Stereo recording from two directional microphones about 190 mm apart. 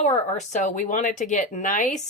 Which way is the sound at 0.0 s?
40° left (ahead or behind).